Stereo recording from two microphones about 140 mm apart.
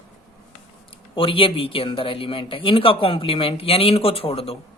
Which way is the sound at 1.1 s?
40° left (ahead or behind).